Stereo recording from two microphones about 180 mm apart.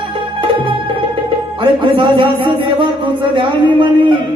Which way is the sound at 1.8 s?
25° right (ahead or behind).